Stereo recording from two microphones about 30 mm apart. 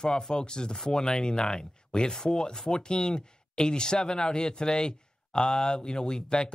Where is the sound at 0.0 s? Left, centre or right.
Left.